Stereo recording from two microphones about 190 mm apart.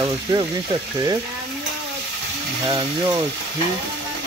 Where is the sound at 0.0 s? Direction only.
25° right (ahead or behind).